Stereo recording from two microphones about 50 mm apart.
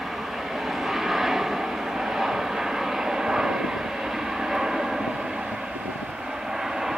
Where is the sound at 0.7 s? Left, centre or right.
Centre.